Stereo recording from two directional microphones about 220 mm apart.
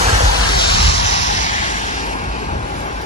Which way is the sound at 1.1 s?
35° left (ahead or behind).